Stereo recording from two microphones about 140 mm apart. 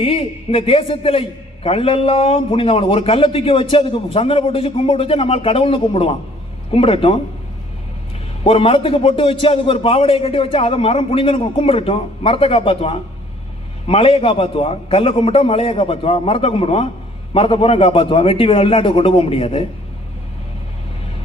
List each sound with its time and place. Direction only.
0.0 s a man's voice: 40° left (ahead or behind)
8.4 s a man's voice: 45° left (ahead or behind)